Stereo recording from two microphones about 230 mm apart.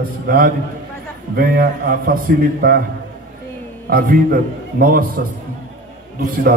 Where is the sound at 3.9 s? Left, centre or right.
Right.